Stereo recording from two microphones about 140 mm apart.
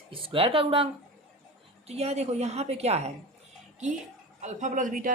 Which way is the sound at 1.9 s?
50° right (ahead or behind).